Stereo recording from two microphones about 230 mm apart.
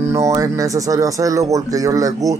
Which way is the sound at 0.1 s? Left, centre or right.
Centre.